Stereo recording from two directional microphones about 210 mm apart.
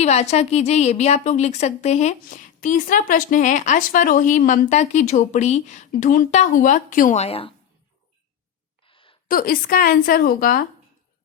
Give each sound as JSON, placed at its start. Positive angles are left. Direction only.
{"t": 0.0, "sound": "a woman's voice", "side_deg": 30}
{"t": 8.9, "sound": "a sound", "side_deg": 25}
{"t": 9.2, "sound": "speech", "side_deg": 40}